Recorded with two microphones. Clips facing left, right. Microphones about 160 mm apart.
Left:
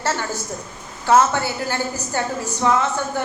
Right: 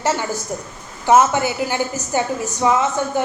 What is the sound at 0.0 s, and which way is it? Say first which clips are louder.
A woman's voice: right 3 dB; 15° right (ahead or behind).